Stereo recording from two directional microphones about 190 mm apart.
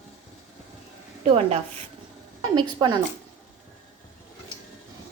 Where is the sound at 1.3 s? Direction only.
35° right (ahead or behind).